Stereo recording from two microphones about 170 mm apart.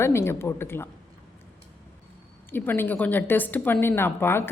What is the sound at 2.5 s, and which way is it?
A woman's voice, 10° left (ahead or behind).